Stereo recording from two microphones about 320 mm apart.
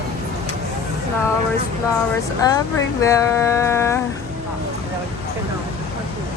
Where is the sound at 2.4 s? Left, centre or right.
Centre.